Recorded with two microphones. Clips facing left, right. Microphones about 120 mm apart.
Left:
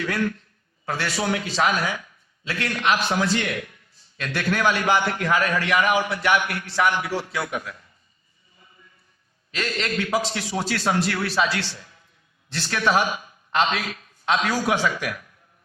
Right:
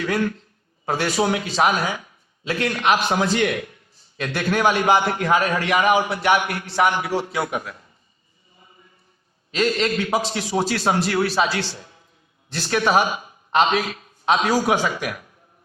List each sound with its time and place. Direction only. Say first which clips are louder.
0.0 s a man's voice: right 3 dB; 30° right (ahead or behind)
1.1 s a man's voice: right 2 dB; 25° right (ahead or behind)
3.3 s a man's voice: right 5 dB; 35° right (ahead or behind)
7.0 s a man's voice: right 4 dB; 30° right (ahead or behind)
9.6 s a man's voice: right 6 dB; 25° right (ahead or behind)
14.4 s speech: right 3 dB; 40° right (ahead or behind)